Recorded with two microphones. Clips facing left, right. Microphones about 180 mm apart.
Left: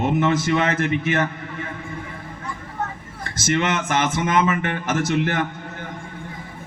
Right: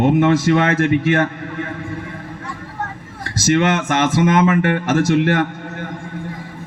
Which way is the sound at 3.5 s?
55° right (ahead or behind).